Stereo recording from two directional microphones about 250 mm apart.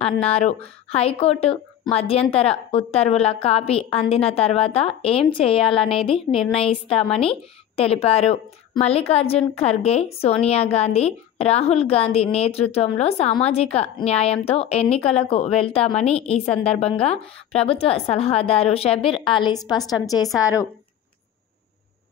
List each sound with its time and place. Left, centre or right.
0.0 s a woman's voice: left